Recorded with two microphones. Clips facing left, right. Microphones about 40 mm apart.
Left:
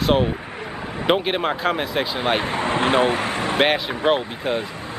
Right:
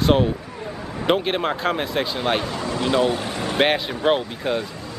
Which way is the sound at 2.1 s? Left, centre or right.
Centre.